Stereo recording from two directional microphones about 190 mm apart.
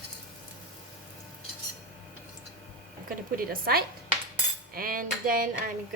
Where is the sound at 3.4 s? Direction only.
50° right (ahead or behind).